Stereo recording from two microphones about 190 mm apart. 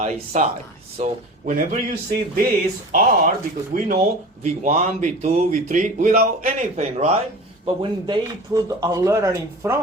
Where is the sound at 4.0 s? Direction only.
35° right (ahead or behind).